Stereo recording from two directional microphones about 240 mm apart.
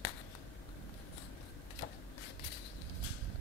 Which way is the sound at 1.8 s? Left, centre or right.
Left.